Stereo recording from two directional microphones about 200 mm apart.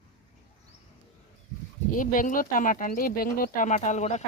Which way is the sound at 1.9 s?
40° left (ahead or behind).